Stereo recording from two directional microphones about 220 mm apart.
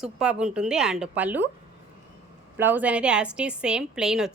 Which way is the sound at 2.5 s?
10° right (ahead or behind).